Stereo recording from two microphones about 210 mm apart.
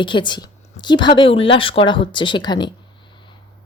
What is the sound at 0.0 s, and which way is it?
A woman's voice, 20° left (ahead or behind).